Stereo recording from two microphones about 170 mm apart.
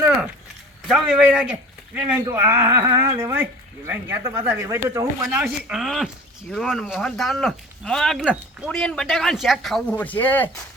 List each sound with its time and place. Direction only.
0.9 s speech: centre (ahead or behind)
5.2 s speech: 5° right (ahead or behind)